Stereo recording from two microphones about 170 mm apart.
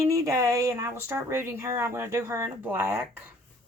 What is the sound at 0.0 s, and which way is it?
Speech, 20° right (ahead or behind).